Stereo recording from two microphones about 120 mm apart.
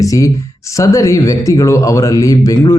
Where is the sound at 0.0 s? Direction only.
30° left (ahead or behind).